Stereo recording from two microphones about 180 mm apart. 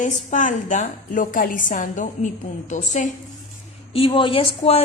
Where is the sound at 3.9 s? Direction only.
30° left (ahead or behind).